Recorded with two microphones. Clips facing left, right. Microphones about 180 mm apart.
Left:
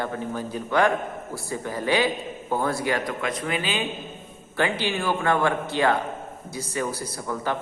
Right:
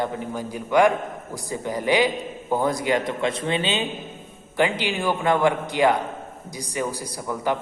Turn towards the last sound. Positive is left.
turn(degrees=-15)  # may be behind; listen again after turning